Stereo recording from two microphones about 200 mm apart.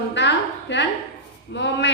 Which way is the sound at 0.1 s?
60° left (ahead or behind).